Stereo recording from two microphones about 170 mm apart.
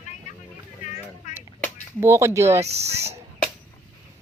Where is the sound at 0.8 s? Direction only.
45° left (ahead or behind).